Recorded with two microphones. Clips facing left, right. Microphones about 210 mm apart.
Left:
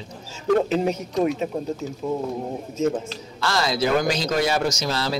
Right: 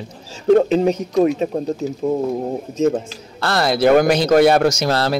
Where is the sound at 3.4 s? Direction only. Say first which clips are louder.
Right 6 dB; 60° right (ahead or behind).